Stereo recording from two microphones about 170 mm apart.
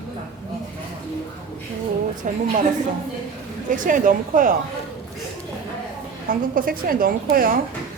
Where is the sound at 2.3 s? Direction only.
50° right (ahead or behind).